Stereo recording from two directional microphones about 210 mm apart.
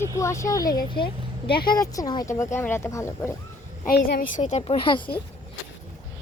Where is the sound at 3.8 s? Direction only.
45° left (ahead or behind); by 5.1 s 20° left (ahead or behind).